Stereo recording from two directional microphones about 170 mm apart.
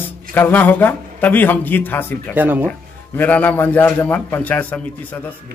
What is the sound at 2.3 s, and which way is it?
Speech, 10° right (ahead or behind).